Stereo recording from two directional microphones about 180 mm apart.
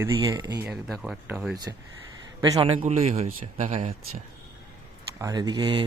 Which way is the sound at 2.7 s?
35° right (ahead or behind).